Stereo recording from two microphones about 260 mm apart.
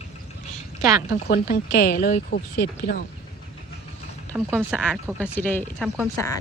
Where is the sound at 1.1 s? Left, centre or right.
Left.